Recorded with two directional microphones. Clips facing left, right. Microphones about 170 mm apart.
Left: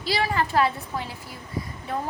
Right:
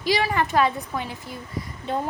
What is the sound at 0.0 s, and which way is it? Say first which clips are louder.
Speech: right 2 dB; 15° right (ahead or behind).